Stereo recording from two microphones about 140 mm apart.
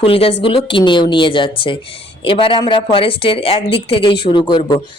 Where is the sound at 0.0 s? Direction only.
40° left (ahead or behind).